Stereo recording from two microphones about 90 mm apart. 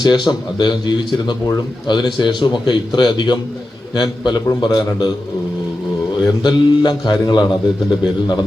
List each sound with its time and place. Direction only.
0.0 s a man's voice: 50° left (ahead or behind)
6.2 s a man's voice: 55° left (ahead or behind)